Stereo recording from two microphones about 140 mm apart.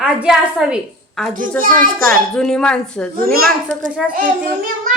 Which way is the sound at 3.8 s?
5° right (ahead or behind).